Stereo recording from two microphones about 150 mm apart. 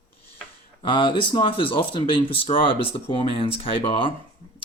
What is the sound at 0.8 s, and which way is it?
Speech, 30° left (ahead or behind).